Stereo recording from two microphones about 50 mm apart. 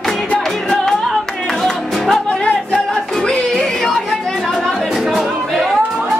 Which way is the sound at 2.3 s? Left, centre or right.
Centre.